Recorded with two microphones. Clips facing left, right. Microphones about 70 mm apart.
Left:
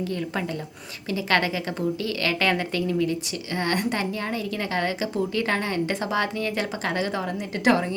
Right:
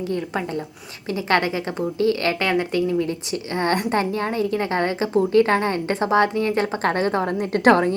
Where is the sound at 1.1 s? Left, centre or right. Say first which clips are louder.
Right 3 dB; right.